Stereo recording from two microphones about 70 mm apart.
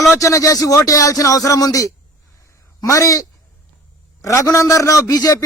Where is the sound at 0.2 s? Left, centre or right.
Left.